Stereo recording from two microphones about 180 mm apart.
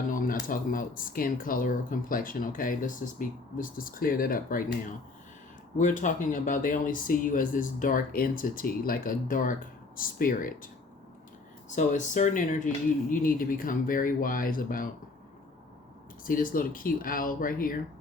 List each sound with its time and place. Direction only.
0.1 s speech: 50° left (ahead or behind)
5.7 s speech: 45° left (ahead or behind)
11.7 s speech: 45° left (ahead or behind)
16.2 s speech: 50° left (ahead or behind)